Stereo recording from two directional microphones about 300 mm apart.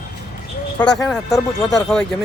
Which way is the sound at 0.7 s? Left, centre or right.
Centre.